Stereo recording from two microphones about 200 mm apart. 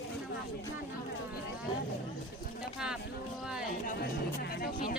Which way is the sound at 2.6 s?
5° right (ahead or behind).